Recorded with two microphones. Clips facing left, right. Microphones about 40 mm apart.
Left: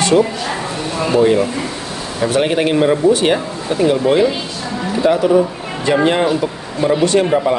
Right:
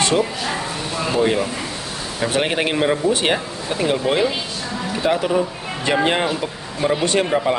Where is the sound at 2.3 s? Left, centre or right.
Right.